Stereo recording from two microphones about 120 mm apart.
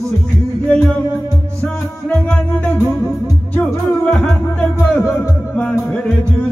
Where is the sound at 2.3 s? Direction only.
10° left (ahead or behind).